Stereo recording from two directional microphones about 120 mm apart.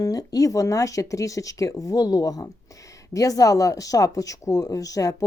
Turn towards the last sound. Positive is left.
turn(degrees=30)  # may be behind; listen again after turning